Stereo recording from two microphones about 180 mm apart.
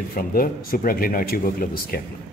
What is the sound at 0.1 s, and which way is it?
A man's voice, 55° left (ahead or behind).